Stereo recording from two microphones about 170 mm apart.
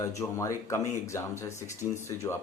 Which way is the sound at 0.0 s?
20° left (ahead or behind).